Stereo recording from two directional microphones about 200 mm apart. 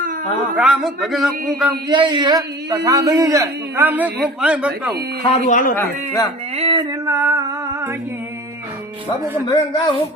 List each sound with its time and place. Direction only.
0.5 s speech: 5° right (ahead or behind)
1.9 s a man's voice: 25° right (ahead or behind); by 4.9 s 5° right (ahead or behind)
5.5 s speech: 40° left (ahead or behind)
5.7 s speech: 10° left (ahead or behind)
6.6 s music: 25° right (ahead or behind)
9.5 s speech: 20° left (ahead or behind)